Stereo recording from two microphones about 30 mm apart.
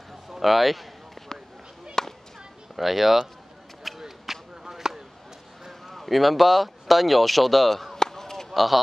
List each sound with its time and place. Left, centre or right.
0.3 s speech: centre
2.0 s a sound: centre
2.7 s speech: centre
4.0 s a sound: centre
5.7 s speech: centre
8.0 s chop: centre
8.5 s speech: centre